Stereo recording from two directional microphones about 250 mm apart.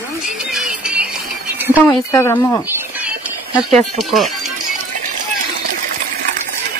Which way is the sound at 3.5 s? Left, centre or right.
Centre.